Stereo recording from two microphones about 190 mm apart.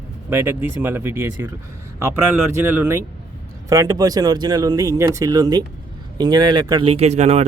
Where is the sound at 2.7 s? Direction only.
10° right (ahead or behind); by 7.4 s 35° right (ahead or behind).